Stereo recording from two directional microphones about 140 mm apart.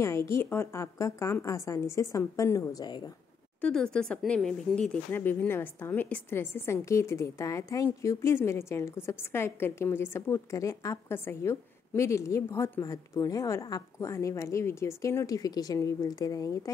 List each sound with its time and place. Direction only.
0.0 s speech: 20° left (ahead or behind)
3.6 s speech: 5° left (ahead or behind); by 16.7 s 25° left (ahead or behind)